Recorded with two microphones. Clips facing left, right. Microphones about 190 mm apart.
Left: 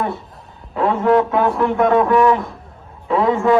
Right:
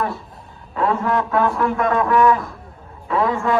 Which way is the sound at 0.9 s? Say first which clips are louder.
Left 6 dB; 20° left (ahead or behind).